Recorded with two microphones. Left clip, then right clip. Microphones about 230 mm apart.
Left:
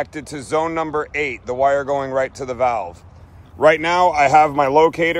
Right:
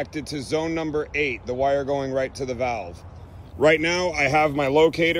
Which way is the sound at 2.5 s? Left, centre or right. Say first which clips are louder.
Left 10 dB; left.